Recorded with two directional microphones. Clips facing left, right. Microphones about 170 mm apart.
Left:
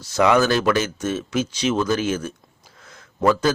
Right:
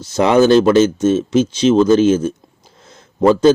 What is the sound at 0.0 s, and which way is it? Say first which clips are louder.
A man's voice: right 5 dB; 25° right (ahead or behind).